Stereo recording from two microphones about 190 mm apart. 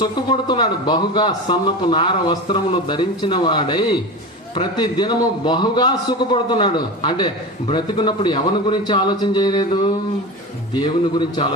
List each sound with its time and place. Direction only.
0.0 s a man's voice: 25° left (ahead or behind)